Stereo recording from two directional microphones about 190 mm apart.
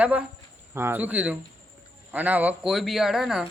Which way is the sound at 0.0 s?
5° right (ahead or behind).